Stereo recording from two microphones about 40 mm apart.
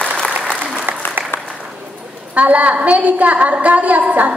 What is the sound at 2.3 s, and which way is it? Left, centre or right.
A woman's voice, right.